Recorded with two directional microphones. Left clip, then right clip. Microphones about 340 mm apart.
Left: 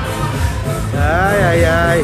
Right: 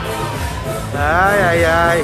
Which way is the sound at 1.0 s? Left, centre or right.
Centre.